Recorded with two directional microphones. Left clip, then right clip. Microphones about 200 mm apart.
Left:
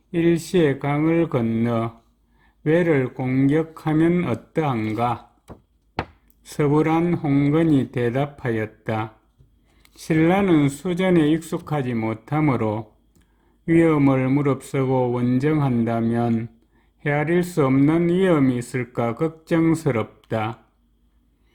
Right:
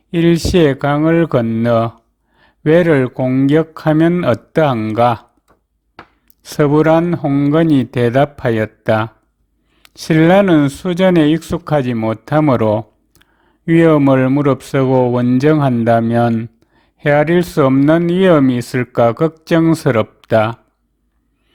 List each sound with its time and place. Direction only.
0.1 s speech: 40° right (ahead or behind)
6.4 s speech: 40° right (ahead or behind)